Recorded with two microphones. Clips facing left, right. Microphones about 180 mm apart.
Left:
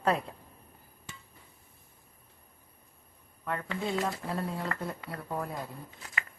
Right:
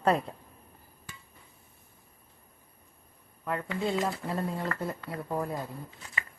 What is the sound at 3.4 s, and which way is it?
A woman's voice, 5° right (ahead or behind).